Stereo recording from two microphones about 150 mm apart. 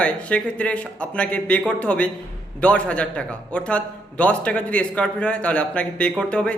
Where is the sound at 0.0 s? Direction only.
10° left (ahead or behind).